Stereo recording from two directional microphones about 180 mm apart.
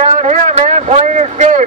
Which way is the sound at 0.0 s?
40° right (ahead or behind).